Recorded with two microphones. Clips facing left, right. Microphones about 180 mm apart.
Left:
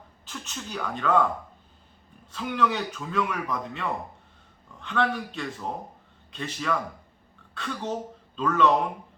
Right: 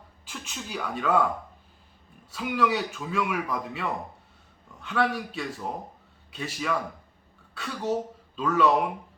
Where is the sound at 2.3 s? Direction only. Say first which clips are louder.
Right 1 dB; 5° right (ahead or behind).